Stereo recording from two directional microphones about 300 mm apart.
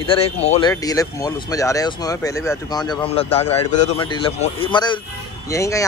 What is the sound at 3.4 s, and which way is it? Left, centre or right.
Speech, left.